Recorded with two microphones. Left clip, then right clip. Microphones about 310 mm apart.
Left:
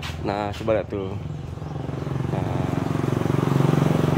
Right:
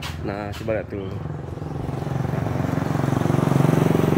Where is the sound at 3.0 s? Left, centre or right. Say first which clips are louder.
Right 3 dB; right.